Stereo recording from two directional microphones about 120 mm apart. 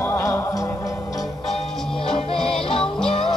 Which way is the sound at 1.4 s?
Centre (ahead or behind).